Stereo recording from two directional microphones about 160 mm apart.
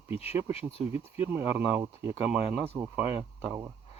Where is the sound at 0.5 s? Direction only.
40° left (ahead or behind).